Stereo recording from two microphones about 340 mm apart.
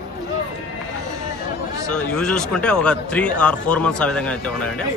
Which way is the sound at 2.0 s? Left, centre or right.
Centre.